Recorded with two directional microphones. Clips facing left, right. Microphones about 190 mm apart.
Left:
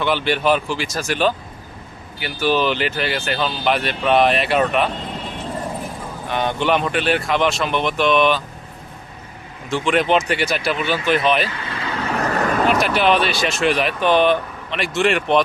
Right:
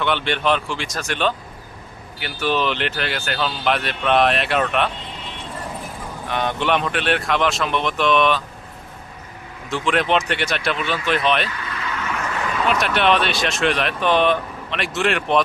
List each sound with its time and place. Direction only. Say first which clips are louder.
0.0 s speech: left 2 dB; 5° left (ahead or behind)
6.2 s speech: left 2 dB; centre (ahead or behind)
9.6 s speech: left 2 dB; centre (ahead or behind)
11.4 s vehicle: left 2 dB; 30° left (ahead or behind); by 12.6 s 45° left (ahead or behind)
12.6 s speech: even; centre (ahead or behind)